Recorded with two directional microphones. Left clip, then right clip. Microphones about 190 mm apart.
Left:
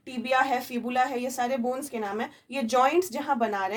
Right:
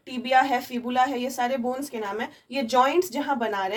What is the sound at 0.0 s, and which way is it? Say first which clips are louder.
A woman's voice: right 4 dB; 35° left (ahead or behind).